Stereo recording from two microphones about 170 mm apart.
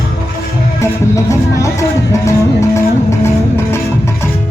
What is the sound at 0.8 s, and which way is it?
Music, 20° left (ahead or behind).